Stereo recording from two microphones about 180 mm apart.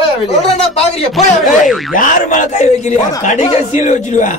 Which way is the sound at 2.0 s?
45° left (ahead or behind).